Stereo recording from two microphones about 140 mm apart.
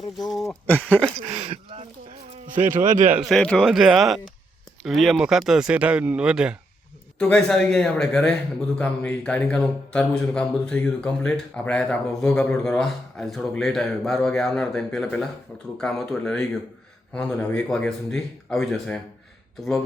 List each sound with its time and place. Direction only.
0.2 s speech: centre (ahead or behind)
1.2 s speech: 45° right (ahead or behind)
2.6 s speech: 65° right (ahead or behind)
3.1 s speech: centre (ahead or behind)
7.2 s speech: 5° left (ahead or behind)